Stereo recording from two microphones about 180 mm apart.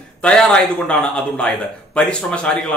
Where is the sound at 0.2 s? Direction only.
5° left (ahead or behind).